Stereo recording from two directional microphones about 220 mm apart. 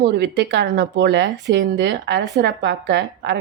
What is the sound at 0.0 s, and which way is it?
A woman's voice, 50° right (ahead or behind).